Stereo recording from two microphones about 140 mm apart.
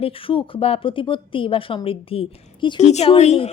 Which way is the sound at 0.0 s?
40° left (ahead or behind).